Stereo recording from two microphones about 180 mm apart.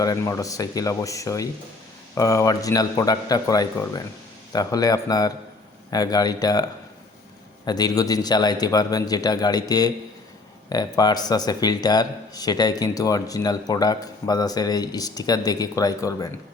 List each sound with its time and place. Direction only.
0.0 s speech: 20° left (ahead or behind)